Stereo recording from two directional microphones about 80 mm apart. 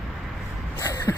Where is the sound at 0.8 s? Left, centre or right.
Left.